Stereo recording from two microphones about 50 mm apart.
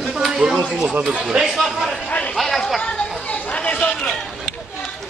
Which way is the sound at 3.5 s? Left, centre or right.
Left.